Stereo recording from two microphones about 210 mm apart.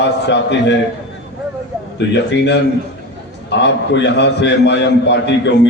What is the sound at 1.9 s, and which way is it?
A man's voice, 55° left (ahead or behind).